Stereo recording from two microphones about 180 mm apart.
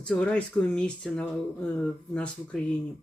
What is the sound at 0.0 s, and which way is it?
Speech, 5° left (ahead or behind).